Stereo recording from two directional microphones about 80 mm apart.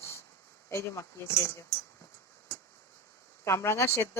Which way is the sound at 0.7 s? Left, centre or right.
Left.